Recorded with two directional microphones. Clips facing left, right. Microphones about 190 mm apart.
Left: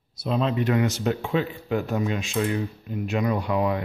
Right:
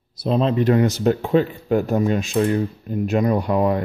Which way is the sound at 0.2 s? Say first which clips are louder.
Right 5 dB; 35° right (ahead or behind).